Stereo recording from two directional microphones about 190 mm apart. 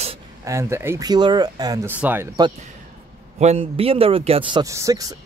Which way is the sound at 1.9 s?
10° right (ahead or behind).